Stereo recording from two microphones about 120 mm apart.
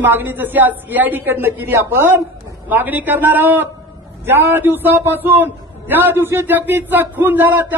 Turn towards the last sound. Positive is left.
turn(degrees=-15)  # may be behind; listen again after turning